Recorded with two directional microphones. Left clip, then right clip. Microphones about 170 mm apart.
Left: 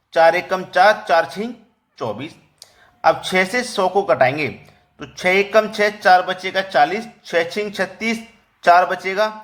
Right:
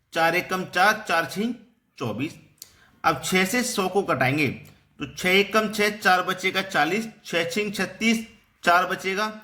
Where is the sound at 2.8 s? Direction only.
15° right (ahead or behind).